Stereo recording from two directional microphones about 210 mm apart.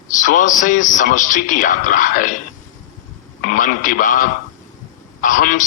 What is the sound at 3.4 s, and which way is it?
A man's voice, 40° left (ahead or behind).